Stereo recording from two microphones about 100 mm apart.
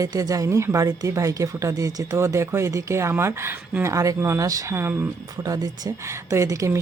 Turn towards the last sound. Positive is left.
turn(degrees=-30)  # may be behind; listen again after turning